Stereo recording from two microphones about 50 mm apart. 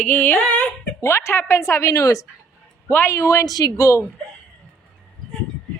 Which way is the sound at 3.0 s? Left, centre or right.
Left.